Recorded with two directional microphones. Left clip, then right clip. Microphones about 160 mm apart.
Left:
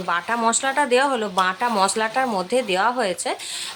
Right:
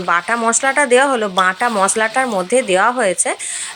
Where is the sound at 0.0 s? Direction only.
20° right (ahead or behind).